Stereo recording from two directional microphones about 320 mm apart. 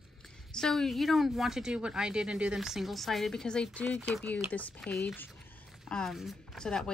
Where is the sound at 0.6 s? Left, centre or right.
Centre.